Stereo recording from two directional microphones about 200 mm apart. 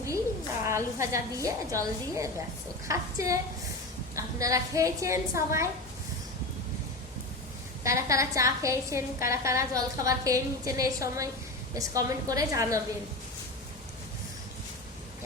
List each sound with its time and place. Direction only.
0.6 s a woman's voice: 15° right (ahead or behind)
7.9 s a woman's voice: 15° right (ahead or behind)